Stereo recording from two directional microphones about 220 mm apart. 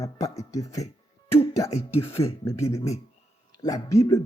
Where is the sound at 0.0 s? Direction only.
15° left (ahead or behind).